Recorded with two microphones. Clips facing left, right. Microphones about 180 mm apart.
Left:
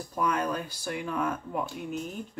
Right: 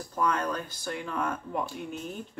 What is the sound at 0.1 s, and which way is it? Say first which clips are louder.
Speech: even; 10° left (ahead or behind).